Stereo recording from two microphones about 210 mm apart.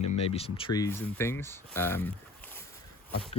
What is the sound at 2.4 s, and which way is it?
Boat, 10° left (ahead or behind).